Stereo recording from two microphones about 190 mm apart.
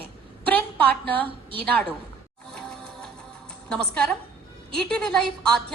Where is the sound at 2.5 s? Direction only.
5° left (ahead or behind).